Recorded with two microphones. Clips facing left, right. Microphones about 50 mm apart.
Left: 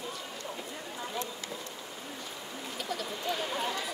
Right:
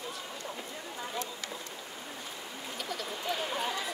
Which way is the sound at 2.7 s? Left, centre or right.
Centre.